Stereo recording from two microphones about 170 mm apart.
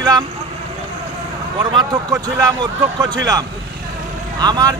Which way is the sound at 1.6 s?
25° right (ahead or behind).